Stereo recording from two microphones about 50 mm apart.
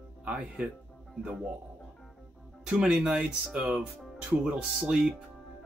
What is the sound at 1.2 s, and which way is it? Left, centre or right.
Speech, right.